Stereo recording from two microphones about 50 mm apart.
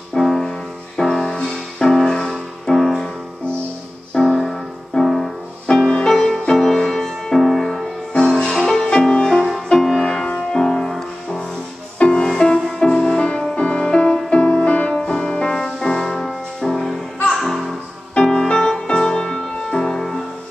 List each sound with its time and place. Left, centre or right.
0.1 s music: centre
4.1 s music: centre
8.9 s music: centre
14.9 s music: centre